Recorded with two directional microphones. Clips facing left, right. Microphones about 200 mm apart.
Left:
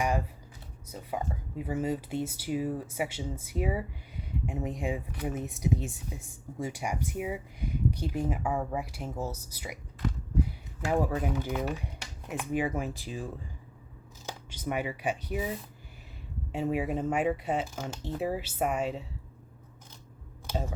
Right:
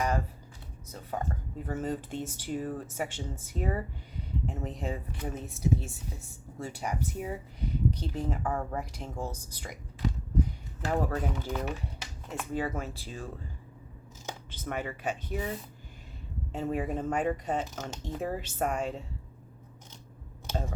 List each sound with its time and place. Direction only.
0.9 s speech: 10° left (ahead or behind)
10.8 s speech: 10° left (ahead or behind)
14.5 s speech: 10° left (ahead or behind)
20.5 s speech: 5° left (ahead or behind)